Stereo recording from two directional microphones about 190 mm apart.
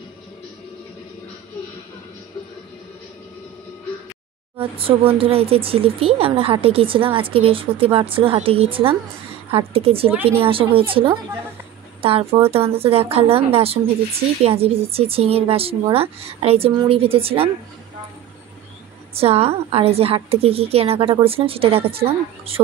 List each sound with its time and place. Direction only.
4.6 s speech: 30° right (ahead or behind)
19.1 s speech: 30° right (ahead or behind)